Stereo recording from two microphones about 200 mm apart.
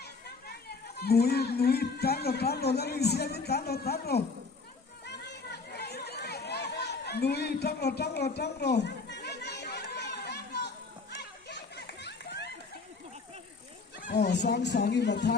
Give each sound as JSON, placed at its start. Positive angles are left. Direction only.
{"t": 0.0, "sound": "speech", "side_deg": 55}
{"t": 5.0, "sound": "a sound", "side_deg": 55}
{"t": 8.4, "sound": "children playing", "side_deg": 55}
{"t": 14.0, "sound": "speech", "side_deg": 50}